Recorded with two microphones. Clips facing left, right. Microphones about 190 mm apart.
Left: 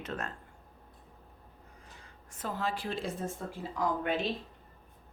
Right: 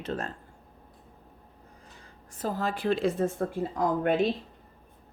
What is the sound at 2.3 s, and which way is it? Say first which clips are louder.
A woman's voice: right 4 dB; 35° right (ahead or behind).